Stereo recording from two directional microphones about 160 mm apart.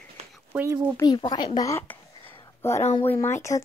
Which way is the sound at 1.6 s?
15° left (ahead or behind).